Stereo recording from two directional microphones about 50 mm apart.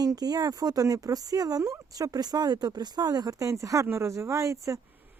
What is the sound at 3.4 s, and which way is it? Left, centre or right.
Speech, right.